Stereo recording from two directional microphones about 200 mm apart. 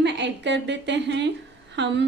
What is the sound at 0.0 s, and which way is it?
A woman's voice, 60° right (ahead or behind).